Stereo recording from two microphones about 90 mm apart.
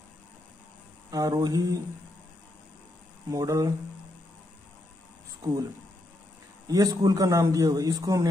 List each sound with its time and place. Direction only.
1.1 s a man's voice: 45° right (ahead or behind)
3.3 s speech: 40° right (ahead or behind)
5.4 s speech: 40° right (ahead or behind)
6.7 s a man's voice: 45° right (ahead or behind)